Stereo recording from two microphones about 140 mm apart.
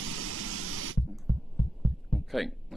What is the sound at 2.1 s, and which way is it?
Heart sounds, centre (ahead or behind).